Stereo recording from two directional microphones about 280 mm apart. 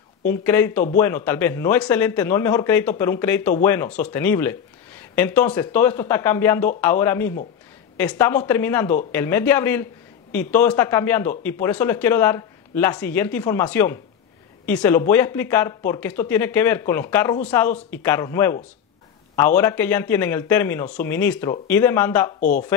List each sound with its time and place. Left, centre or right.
0.3 s speech: centre
22.4 s speech: left